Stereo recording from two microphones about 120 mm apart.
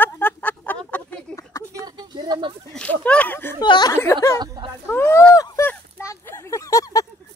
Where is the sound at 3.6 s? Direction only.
40° left (ahead or behind).